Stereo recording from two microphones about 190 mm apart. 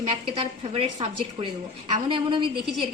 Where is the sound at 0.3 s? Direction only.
30° right (ahead or behind).